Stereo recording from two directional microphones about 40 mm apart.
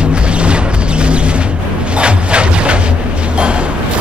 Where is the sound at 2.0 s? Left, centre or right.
Right.